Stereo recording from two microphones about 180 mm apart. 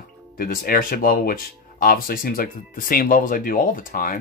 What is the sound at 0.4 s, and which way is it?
Speech, 55° left (ahead or behind).